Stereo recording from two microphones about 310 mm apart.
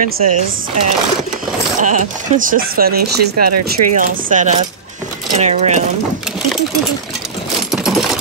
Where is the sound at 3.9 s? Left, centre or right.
Right.